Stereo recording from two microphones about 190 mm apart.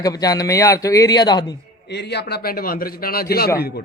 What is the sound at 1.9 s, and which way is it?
Speech, 60° left (ahead or behind).